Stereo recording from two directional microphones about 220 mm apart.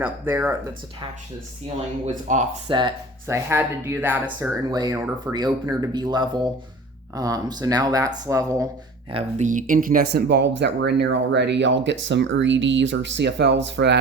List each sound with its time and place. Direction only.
0.0 s speech: 10° right (ahead or behind)
2.2 s speech: 35° right (ahead or behind)
2.6 s speech: 20° right (ahead or behind)
9.1 s speech: 35° right (ahead or behind); by 14.0 s 50° right (ahead or behind)